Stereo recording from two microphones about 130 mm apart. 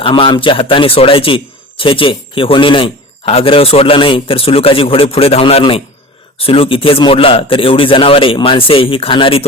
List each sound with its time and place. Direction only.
0.0 s speech: 40° left (ahead or behind)